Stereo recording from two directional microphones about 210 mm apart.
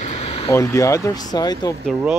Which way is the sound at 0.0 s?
30° left (ahead or behind).